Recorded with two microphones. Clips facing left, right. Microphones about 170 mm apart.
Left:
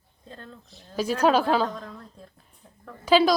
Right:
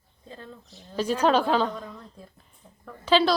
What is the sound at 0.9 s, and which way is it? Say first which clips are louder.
A woman's voice: left 1 dB; 10° left (ahead or behind).